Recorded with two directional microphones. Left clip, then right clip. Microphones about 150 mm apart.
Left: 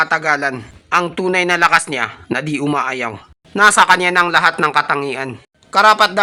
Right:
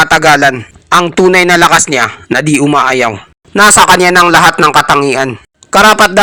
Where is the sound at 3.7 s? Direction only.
35° right (ahead or behind).